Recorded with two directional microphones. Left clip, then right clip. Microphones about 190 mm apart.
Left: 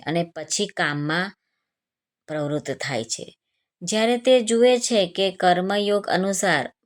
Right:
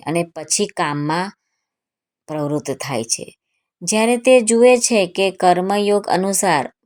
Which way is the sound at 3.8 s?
25° left (ahead or behind).